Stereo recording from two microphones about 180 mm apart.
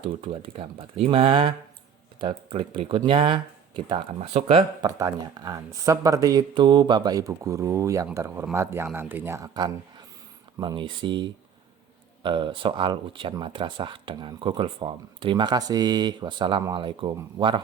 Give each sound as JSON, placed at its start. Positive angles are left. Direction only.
{"t": 0.0, "sound": "speech", "side_deg": -30}
{"t": 4.9, "sound": "speech", "side_deg": -20}